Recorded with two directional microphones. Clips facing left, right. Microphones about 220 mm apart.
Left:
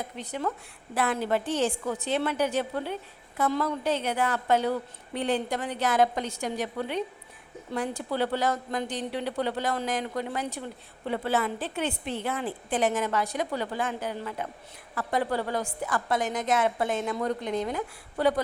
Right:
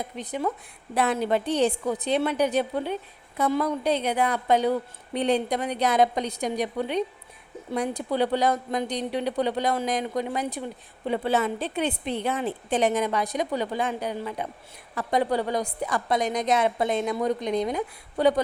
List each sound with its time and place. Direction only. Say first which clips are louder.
0.0 s a woman's voice: right 3 dB; 15° right (ahead or behind)
8.1 s a woman's voice: right 4 dB; 15° right (ahead or behind)